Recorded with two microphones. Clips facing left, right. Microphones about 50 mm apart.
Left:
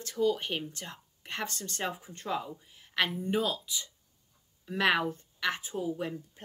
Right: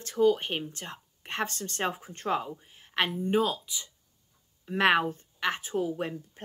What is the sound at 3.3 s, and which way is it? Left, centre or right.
Speech, right.